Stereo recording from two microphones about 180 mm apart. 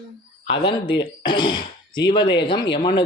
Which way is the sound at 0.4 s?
30° left (ahead or behind).